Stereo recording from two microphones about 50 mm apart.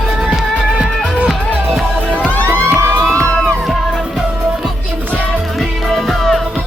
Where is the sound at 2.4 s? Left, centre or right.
Right.